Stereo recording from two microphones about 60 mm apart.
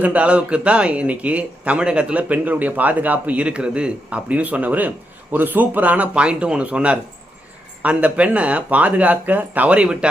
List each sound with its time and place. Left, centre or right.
0.0 s a man's voice: right